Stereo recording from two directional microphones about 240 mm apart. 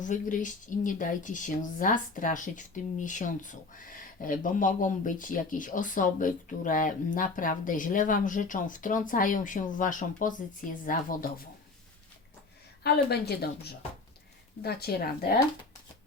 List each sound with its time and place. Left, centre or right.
0.0 s speech: left
12.8 s a woman's voice: left